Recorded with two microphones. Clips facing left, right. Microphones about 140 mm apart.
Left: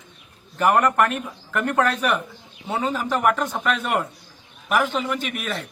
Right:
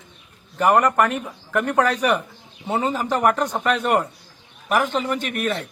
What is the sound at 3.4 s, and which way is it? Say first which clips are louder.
Speech: right 3 dB; 15° right (ahead or behind).